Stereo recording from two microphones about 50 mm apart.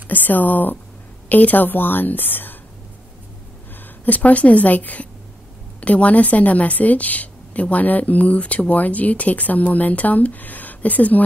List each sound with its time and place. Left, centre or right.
0.1 s a woman's voice: left
4.0 s a woman's voice: left